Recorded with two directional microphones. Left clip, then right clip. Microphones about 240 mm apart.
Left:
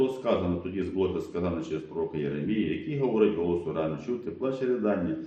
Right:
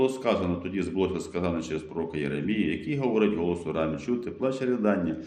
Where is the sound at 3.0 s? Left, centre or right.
Right.